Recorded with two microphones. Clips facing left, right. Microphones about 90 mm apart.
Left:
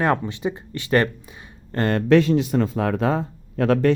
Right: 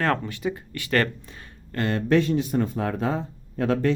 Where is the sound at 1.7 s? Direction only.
30° left (ahead or behind).